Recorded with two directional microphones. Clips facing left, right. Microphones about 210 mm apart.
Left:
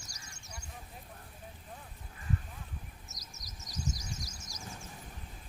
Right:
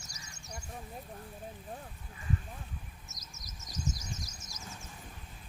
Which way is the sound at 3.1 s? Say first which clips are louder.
Even; 35° left (ahead or behind).